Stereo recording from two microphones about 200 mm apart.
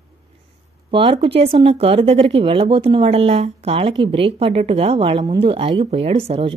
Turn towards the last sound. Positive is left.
turn(degrees=-30)  # may be behind; listen again after turning